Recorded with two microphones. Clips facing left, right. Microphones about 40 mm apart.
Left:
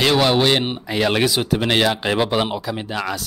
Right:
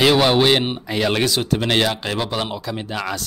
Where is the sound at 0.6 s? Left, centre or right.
Centre.